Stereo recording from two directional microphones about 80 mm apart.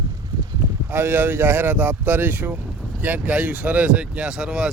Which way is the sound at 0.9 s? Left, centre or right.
Right.